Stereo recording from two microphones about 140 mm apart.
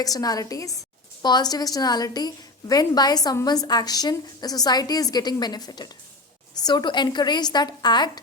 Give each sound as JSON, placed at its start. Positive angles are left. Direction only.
{"t": 0.0, "sound": "a woman's voice", "side_deg": 25}